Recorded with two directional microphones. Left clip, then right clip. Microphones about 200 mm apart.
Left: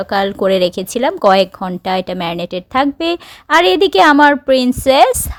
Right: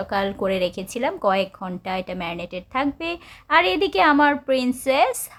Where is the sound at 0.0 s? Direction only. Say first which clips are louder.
Left 8 dB; 35° left (ahead or behind).